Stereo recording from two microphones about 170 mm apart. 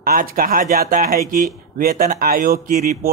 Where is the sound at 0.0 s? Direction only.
60° right (ahead or behind).